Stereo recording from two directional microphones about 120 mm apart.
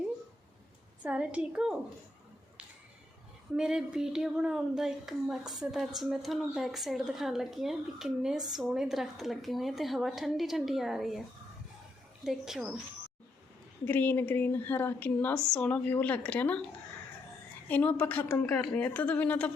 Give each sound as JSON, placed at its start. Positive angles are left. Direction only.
{"t": 1.0, "sound": "a woman's voice", "side_deg": -10}
{"t": 3.6, "sound": "speech", "side_deg": -5}
{"t": 12.2, "sound": "speech", "side_deg": -5}
{"t": 13.8, "sound": "a woman's voice", "side_deg": 15}
{"t": 17.7, "sound": "a woman's voice", "side_deg": 10}